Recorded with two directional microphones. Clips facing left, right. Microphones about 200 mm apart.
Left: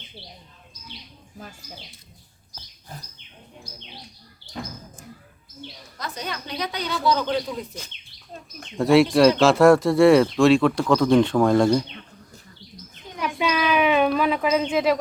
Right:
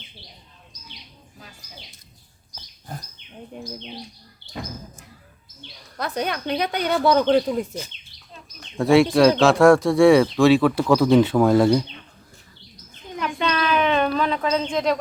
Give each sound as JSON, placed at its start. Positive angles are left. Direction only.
{"t": 6.0, "sound": "a woman's voice", "side_deg": -60}
{"t": 8.8, "sound": "speech", "side_deg": 0}
{"t": 13.1, "sound": "a sound", "side_deg": 10}